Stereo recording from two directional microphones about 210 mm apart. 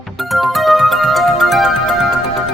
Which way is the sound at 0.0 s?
Centre (ahead or behind).